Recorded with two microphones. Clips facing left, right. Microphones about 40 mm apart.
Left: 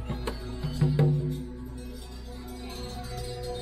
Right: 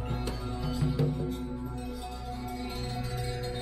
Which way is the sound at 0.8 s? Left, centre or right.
Centre.